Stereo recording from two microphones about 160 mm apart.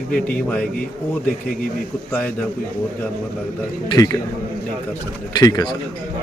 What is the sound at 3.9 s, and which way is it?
Speech, 20° left (ahead or behind).